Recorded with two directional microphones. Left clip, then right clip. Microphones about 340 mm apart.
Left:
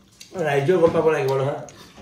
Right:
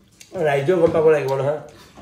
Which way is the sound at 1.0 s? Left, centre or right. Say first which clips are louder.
Right 3 dB; centre.